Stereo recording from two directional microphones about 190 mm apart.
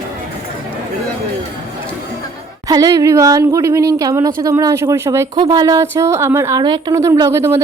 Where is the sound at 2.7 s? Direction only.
20° right (ahead or behind).